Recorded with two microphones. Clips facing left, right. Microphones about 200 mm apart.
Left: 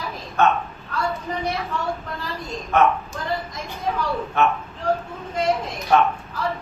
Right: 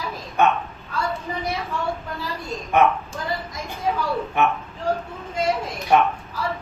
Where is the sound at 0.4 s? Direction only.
15° right (ahead or behind).